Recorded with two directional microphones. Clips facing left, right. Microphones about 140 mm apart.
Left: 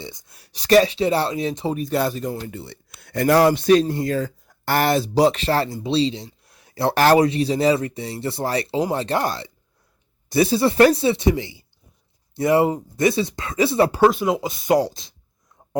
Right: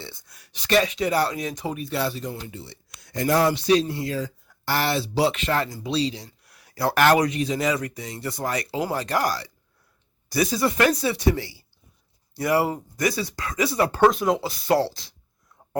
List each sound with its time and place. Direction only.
0.0 s speech: 15° left (ahead or behind)
0.3 s speech: 35° left (ahead or behind)
13.9 s speech: 5° left (ahead or behind)
14.4 s speech: 20° left (ahead or behind)